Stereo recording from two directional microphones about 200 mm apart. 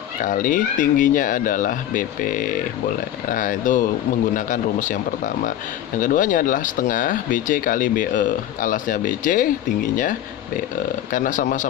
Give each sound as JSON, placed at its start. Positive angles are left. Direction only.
{"t": 0.2, "sound": "a man's voice", "side_deg": 40}